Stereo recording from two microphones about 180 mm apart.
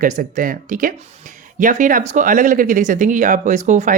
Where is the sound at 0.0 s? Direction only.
50° right (ahead or behind).